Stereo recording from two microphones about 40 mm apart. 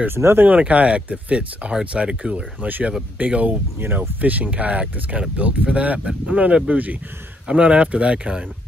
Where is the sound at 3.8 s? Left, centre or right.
Right.